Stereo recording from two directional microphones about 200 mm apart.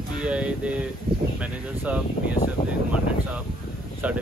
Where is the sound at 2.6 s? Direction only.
20° left (ahead or behind).